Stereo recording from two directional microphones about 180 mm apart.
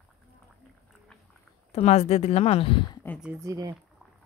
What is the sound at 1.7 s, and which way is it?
Speech, 40° left (ahead or behind).